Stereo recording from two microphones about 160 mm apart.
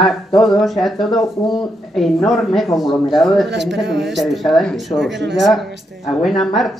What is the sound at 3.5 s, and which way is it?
Speech, 90° right.